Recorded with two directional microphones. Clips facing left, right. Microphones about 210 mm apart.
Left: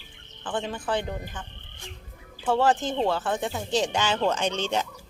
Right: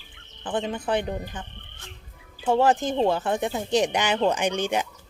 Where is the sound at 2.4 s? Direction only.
20° right (ahead or behind).